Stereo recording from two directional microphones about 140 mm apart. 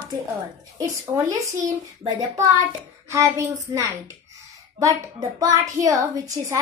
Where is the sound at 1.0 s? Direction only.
25° right (ahead or behind).